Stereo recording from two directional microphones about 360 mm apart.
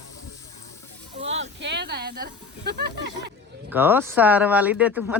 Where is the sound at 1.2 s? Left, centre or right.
Centre.